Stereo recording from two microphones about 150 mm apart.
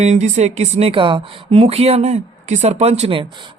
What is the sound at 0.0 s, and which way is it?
Speech, 50° right (ahead or behind).